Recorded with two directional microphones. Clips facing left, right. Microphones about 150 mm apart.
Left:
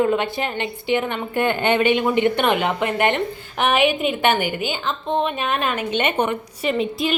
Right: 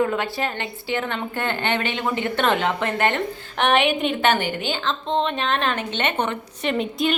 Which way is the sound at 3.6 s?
5° left (ahead or behind).